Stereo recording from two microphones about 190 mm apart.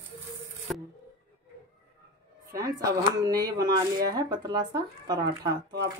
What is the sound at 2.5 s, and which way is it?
Speech, 15° right (ahead or behind).